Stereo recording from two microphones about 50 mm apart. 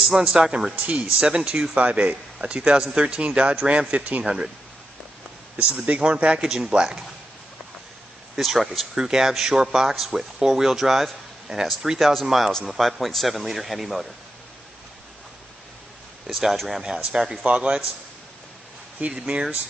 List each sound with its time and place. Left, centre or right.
0.2 s a man's voice: centre
4.2 s speech: centre
5.6 s a man's voice: right
6.4 s speech: centre
8.4 s speech: centre
9.0 s speech: centre
12.1 s speech: centre
16.3 s speech: centre
19.1 s speech: centre